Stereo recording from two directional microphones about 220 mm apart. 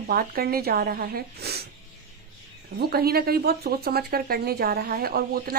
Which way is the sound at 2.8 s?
45° right (ahead or behind).